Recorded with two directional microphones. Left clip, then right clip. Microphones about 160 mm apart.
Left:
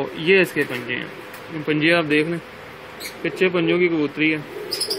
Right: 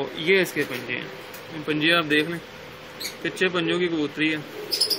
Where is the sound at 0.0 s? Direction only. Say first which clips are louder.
Left 4 dB; 30° left (ahead or behind).